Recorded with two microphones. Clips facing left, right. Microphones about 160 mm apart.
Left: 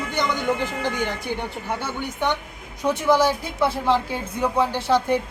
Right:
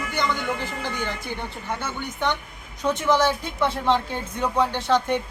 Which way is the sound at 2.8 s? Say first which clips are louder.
Left 2 dB; 10° left (ahead or behind).